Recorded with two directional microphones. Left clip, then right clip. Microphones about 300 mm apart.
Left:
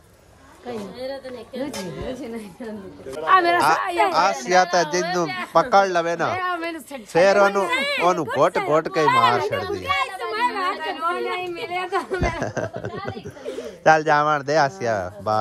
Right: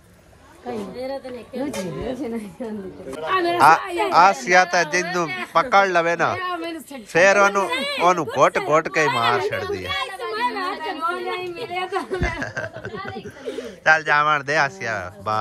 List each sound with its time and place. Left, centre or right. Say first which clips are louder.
3.3 s speech: right 1 dB; centre
7.6 s speech: right 1 dB; centre
9.8 s a sound: left 3 dB; centre
12.2 s speech: left 1 dB; left